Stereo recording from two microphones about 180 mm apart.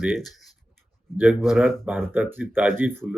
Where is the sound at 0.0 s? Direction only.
Centre (ahead or behind).